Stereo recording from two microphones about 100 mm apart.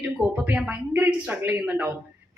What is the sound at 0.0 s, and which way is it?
Speech, 15° right (ahead or behind).